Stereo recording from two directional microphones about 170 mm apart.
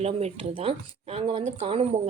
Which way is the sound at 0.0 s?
40° right (ahead or behind).